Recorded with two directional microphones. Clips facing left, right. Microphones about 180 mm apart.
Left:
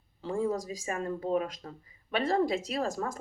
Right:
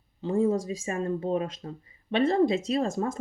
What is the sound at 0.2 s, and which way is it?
Speech, 25° right (ahead or behind).